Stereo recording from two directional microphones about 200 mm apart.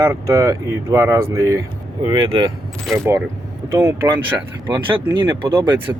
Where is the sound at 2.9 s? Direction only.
Centre (ahead or behind).